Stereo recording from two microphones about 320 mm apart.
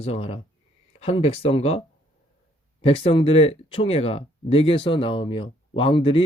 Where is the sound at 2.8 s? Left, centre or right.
Centre.